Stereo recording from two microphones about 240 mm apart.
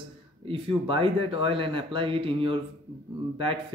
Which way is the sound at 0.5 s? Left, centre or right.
Right.